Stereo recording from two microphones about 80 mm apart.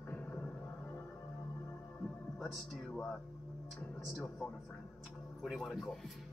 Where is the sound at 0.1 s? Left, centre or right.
Centre.